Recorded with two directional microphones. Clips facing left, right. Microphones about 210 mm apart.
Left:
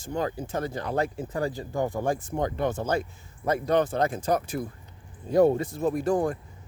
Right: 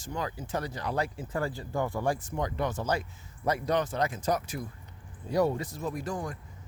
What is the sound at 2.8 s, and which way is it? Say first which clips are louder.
Speech: left 4 dB; 50° left (ahead or behind).